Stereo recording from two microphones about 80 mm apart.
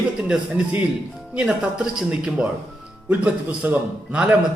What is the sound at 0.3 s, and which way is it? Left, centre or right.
A man's voice, centre.